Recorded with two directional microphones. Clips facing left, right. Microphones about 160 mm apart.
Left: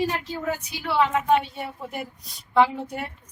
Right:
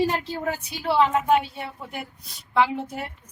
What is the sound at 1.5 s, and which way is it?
Speech, centre (ahead or behind).